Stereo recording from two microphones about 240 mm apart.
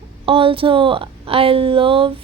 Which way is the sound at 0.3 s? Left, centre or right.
Right.